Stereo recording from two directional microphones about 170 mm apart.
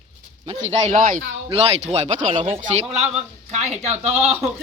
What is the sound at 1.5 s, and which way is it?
A man's voice, 40° right (ahead or behind).